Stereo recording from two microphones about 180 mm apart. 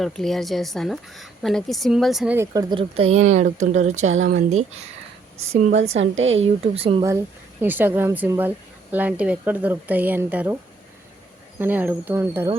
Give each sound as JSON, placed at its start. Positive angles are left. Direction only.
{"t": 0.0, "sound": "a woman's voice", "side_deg": 0}
{"t": 6.0, "sound": "a woman's voice", "side_deg": -90}
{"t": 6.4, "sound": "speech", "side_deg": -35}
{"t": 7.6, "sound": "speech", "side_deg": -10}
{"t": 11.6, "sound": "speech", "side_deg": -10}